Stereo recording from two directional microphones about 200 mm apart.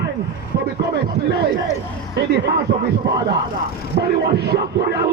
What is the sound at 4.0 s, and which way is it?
Music, 55° right (ahead or behind).